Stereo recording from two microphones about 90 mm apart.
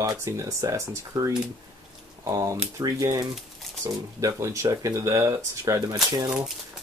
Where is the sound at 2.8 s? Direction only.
40° right (ahead or behind).